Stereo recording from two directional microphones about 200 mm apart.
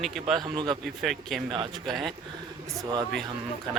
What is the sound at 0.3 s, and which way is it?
Speech, 20° right (ahead or behind).